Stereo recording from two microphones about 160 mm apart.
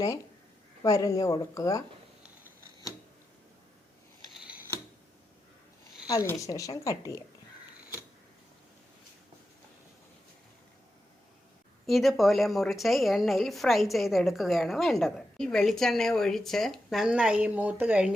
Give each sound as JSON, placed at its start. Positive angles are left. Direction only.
{"t": 0.8, "sound": "a woman's voice", "side_deg": 20}
{"t": 6.1, "sound": "a woman's voice", "side_deg": 20}
{"t": 11.9, "sound": "a woman's voice", "side_deg": 0}